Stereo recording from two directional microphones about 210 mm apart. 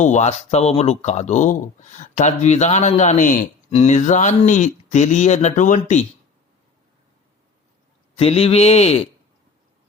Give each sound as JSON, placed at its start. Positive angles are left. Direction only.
{"t": 0.0, "sound": "speech", "side_deg": 35}
{"t": 8.1, "sound": "speech", "side_deg": 30}